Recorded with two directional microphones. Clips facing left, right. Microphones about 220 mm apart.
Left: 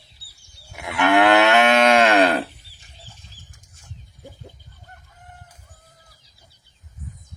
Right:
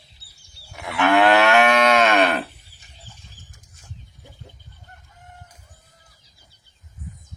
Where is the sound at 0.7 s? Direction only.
15° left (ahead or behind); by 2.4 s 30° left (ahead or behind).